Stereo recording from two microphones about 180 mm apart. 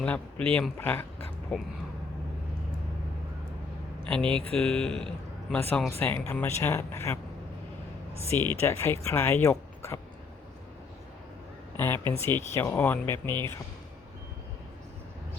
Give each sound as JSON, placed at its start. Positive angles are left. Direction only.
{"t": 0.0, "sound": "speech", "side_deg": 10}
{"t": 4.2, "sound": "speech", "side_deg": -30}
{"t": 4.5, "sound": "speech", "side_deg": 5}
{"t": 8.3, "sound": "speech", "side_deg": 15}
{"t": 11.8, "sound": "speech", "side_deg": 15}